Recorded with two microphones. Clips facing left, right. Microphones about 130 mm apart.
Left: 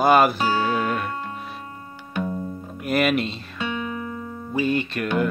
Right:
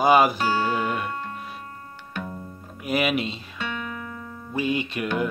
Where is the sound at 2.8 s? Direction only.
5° right (ahead or behind).